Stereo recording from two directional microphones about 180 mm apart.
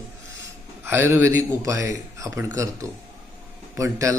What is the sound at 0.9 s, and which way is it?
Speech, 10° right (ahead or behind).